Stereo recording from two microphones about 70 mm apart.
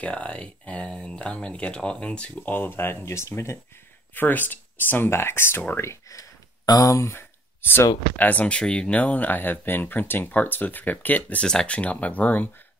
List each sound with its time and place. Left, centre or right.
0.0 s speech: centre; by 3.5 s left
4.1 s speech: left
5.8 s speech: left
7.2 s a sound: left
8.2 s speech: left